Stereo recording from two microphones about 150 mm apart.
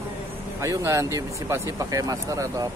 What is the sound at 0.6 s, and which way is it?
Speech, 20° right (ahead or behind).